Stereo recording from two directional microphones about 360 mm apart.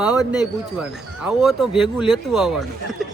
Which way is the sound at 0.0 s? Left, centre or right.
Centre.